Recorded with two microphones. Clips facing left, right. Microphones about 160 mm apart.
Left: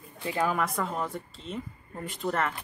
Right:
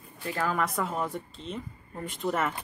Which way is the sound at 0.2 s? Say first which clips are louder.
Left 2 dB; 15° left (ahead or behind).